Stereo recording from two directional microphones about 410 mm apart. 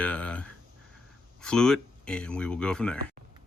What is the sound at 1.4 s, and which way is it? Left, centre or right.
Speech, centre.